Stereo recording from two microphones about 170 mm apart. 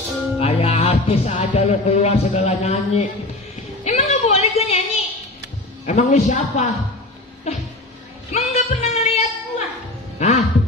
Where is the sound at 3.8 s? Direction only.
40° left (ahead or behind).